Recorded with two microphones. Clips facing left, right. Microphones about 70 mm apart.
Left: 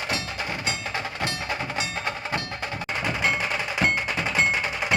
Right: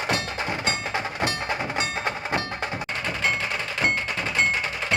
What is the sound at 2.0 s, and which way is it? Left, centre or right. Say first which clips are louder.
Percussion: right 2 dB; right.